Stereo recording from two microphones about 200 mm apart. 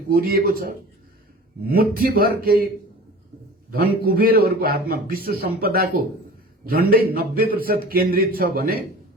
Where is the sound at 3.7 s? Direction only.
50° right (ahead or behind).